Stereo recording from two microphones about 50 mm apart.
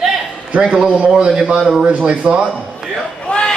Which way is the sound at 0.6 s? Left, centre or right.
Centre.